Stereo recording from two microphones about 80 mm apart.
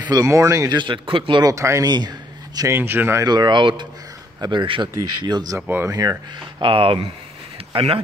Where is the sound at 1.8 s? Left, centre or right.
Right.